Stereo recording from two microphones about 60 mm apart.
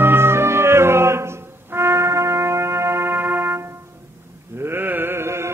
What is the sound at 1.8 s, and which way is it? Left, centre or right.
Brass instrument, right.